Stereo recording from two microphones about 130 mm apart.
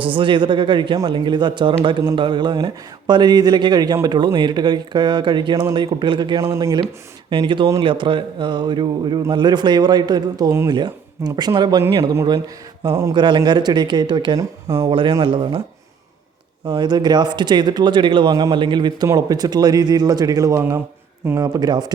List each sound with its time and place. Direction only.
0.0 s speech: 40° right (ahead or behind)
7.3 s speech: 40° right (ahead or behind)
13.1 s speech: 35° right (ahead or behind)
16.6 s speech: 35° right (ahead or behind)